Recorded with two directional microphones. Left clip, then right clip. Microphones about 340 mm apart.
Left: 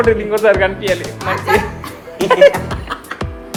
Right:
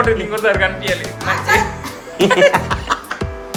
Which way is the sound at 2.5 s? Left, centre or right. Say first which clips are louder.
Right 5 dB; right.